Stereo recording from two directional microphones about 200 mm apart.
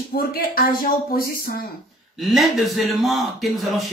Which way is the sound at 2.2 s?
Centre (ahead or behind).